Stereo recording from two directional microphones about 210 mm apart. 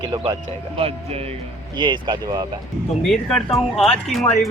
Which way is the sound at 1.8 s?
20° right (ahead or behind).